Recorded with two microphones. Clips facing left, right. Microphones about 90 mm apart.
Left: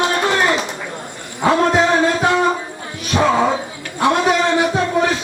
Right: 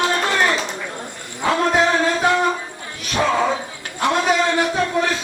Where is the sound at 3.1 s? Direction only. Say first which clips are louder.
Left 3 dB; 15° left (ahead or behind).